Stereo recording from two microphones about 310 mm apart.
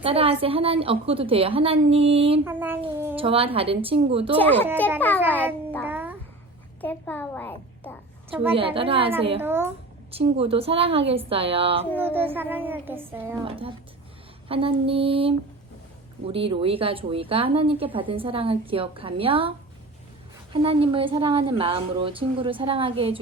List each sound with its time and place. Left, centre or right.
0.0 s speech: centre
2.4 s speech: centre
4.4 s a child's voice: centre
5.8 s a sound: centre
6.8 s a child's voice: centre
8.5 s speech: centre
9.4 s speech: centre
10.1 s speech: centre
11.9 s speech: centre